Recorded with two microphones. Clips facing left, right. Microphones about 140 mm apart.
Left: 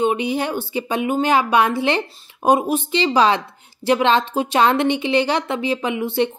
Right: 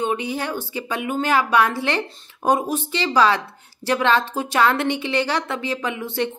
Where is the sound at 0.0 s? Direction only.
15° left (ahead or behind).